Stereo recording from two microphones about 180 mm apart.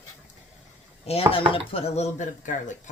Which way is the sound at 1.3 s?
30° left (ahead or behind).